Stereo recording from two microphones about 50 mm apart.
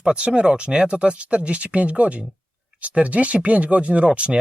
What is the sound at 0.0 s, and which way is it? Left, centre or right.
Speech, centre.